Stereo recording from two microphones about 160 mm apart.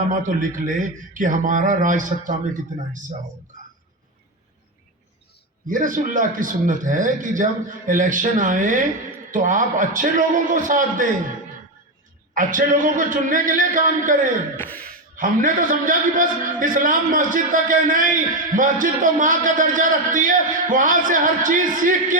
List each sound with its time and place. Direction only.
0.1 s a man's voice: 55° right (ahead or behind)
5.6 s a man's voice: 55° right (ahead or behind)
12.3 s a man's voice: 55° right (ahead or behind)
14.5 s a sound: 10° left (ahead or behind)
15.1 s a man's voice: 60° right (ahead or behind)